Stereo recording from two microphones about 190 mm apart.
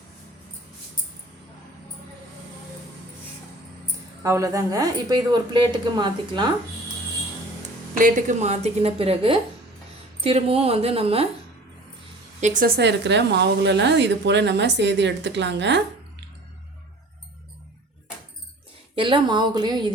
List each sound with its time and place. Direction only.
4.2 s a woman's voice: 15° right (ahead or behind)
7.9 s a woman's voice: 45° right (ahead or behind)
12.4 s a woman's voice: 40° right (ahead or behind); by 15.8 s 65° right (ahead or behind)
18.9 s a woman's voice: 25° right (ahead or behind)